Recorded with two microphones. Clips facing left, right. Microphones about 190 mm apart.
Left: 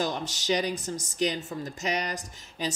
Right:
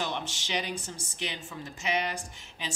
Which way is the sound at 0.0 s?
40° left (ahead or behind).